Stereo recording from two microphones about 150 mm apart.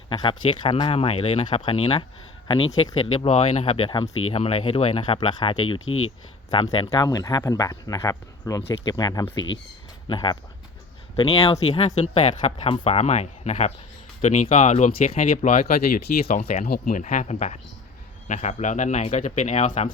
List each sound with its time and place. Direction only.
0.1 s speech: 35° left (ahead or behind); by 14.4 s 55° left (ahead or behind)
14.4 s speech: 45° left (ahead or behind)
16.3 s speech: 70° left (ahead or behind)
16.6 s speech: 90° left
17.0 s speech: 55° left (ahead or behind)